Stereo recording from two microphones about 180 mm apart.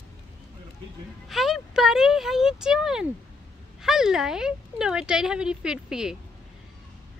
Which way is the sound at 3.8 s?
5° right (ahead or behind).